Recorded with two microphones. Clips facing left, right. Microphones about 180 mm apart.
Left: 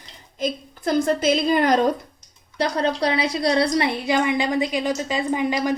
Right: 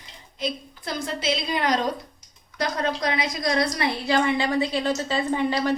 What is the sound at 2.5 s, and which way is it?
A woman's voice, 30° left (ahead or behind).